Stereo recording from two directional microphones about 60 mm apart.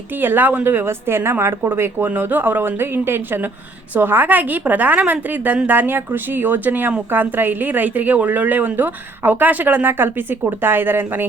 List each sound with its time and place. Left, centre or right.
0.2 s a woman's voice: right